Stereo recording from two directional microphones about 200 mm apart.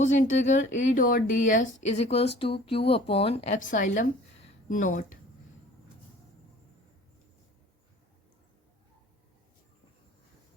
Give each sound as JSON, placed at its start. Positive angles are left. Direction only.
{"t": 0.0, "sound": "a woman's voice", "side_deg": 40}